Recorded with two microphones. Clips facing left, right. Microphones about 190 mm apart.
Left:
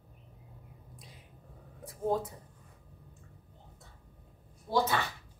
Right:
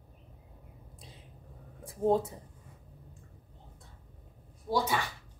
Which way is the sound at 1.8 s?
25° right (ahead or behind).